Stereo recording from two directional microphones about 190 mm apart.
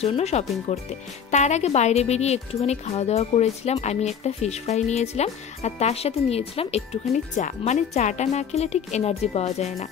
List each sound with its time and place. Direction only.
0.0 s speech: 35° left (ahead or behind)